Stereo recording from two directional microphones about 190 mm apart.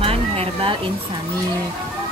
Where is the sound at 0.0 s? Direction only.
30° right (ahead or behind).